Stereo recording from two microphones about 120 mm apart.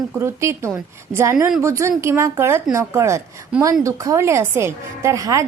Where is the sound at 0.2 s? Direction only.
25° right (ahead or behind).